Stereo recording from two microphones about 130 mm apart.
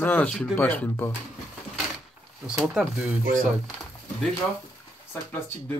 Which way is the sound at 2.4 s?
5° right (ahead or behind).